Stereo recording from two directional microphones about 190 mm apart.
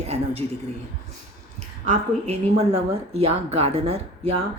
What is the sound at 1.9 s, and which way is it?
Speech, 35° right (ahead or behind).